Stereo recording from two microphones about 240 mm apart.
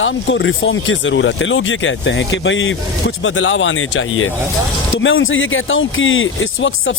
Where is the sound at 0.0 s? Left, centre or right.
Left.